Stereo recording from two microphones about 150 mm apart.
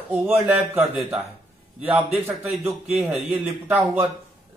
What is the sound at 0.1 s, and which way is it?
A man's voice, 10° right (ahead or behind).